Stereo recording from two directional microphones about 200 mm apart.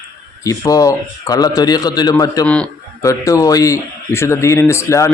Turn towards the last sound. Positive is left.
turn(degrees=15)  # may be behind; listen again after turning